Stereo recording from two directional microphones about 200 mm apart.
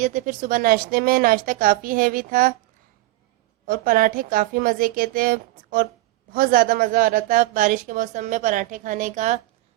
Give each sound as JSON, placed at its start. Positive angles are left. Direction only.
{"t": 0.0, "sound": "speech", "side_deg": -40}
{"t": 3.7, "sound": "a woman's voice", "side_deg": -45}